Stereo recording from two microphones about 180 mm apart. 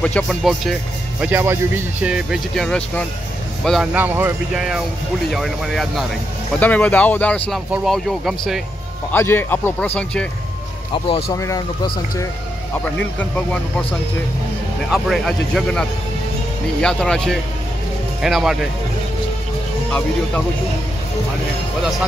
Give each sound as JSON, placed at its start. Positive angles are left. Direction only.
{"t": 0.0, "sound": "speech", "side_deg": 5}
{"t": 1.2, "sound": "speech", "side_deg": -10}
{"t": 5.3, "sound": "speech", "side_deg": 0}
{"t": 9.1, "sound": "speech", "side_deg": 10}
{"t": 11.3, "sound": "speech", "side_deg": 20}
{"t": 12.7, "sound": "speech", "side_deg": 10}
{"t": 14.9, "sound": "speech", "side_deg": 0}
{"t": 16.8, "sound": "speech", "side_deg": 5}